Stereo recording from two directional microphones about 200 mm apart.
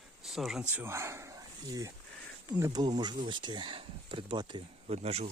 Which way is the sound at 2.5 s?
15° right (ahead or behind).